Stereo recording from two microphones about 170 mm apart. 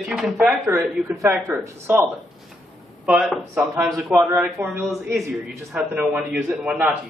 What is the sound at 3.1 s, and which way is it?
Speech, 5° right (ahead or behind).